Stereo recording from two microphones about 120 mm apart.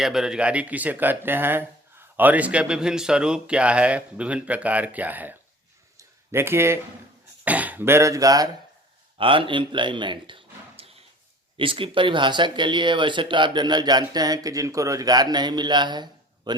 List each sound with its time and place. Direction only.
0.0 s speech: 5° right (ahead or behind)
6.0 s a sound: 20° right (ahead or behind)
7.4 s speech: 15° right (ahead or behind); by 8.4 s 30° right (ahead or behind)
9.1 s speech: 45° right (ahead or behind)